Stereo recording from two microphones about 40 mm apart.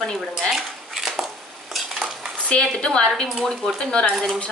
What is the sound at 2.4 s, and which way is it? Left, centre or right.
A woman's voice, left.